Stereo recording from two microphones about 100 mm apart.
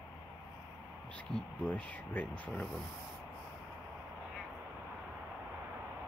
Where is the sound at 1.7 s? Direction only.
15° left (ahead or behind).